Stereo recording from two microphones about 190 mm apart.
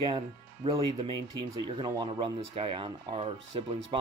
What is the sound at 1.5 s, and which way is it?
Speech, 20° right (ahead or behind).